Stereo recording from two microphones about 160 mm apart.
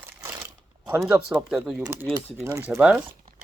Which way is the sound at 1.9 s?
15° right (ahead or behind).